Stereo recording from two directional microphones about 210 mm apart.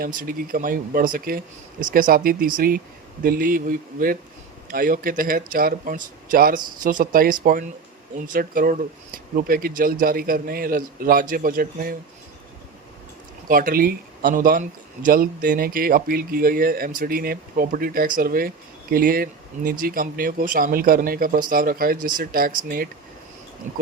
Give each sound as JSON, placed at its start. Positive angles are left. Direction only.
{"t": 0.2, "sound": "a man's voice", "side_deg": -40}
{"t": 13.5, "sound": "a man's voice", "side_deg": -45}